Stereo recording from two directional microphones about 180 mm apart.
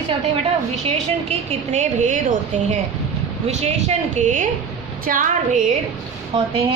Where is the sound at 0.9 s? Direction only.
35° right (ahead or behind).